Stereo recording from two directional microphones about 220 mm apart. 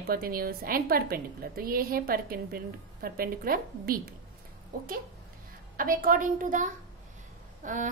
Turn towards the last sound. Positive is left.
turn(degrees=-35)  # may be behind; listen again after turning